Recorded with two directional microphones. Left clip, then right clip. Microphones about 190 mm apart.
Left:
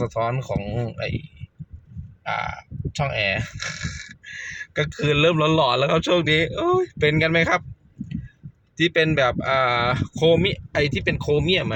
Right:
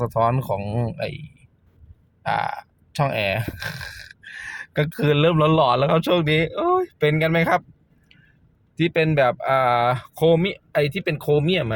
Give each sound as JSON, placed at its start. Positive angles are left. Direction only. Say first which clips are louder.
{"t": 0.0, "sound": "speech", "louder": "right 4 dB", "side_deg": -15}
{"t": 2.2, "sound": "speech", "louder": "right 3 dB", "side_deg": -25}
{"t": 8.8, "sound": "speech", "louder": "even", "side_deg": -10}